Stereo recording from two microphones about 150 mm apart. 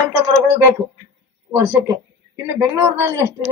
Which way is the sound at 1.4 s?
20° right (ahead or behind).